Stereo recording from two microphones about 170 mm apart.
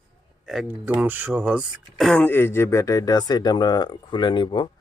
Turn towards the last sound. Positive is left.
turn(degrees=25)  # may be behind; listen again after turning